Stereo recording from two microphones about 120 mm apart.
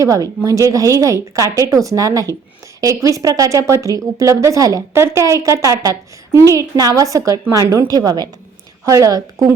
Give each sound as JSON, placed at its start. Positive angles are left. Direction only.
{"t": 0.0, "sound": "speech", "side_deg": -25}